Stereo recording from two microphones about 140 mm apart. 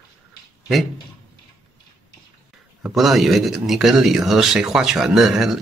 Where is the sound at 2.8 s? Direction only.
Centre (ahead or behind).